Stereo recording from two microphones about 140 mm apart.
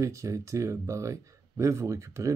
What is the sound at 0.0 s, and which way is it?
Speech, 25° right (ahead or behind).